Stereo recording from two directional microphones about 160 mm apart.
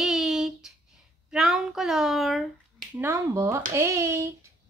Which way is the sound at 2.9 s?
15° right (ahead or behind).